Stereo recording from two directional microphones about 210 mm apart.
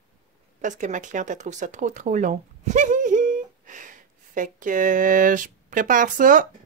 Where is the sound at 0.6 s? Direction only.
35° right (ahead or behind).